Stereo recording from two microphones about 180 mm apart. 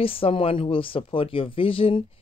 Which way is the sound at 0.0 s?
30° left (ahead or behind).